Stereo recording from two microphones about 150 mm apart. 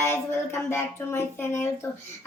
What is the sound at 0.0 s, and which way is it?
Speech, 15° left (ahead or behind).